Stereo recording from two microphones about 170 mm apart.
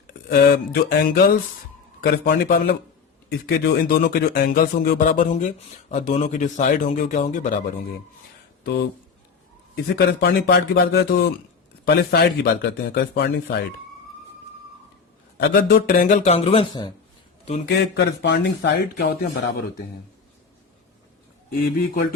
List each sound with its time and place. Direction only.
0.1 s a man's voice: 65° left (ahead or behind)
8.6 s speech: 80° left
15.4 s speech: 70° left (ahead or behind); by 16.6 s 35° left (ahead or behind)
17.7 s speech: 85° left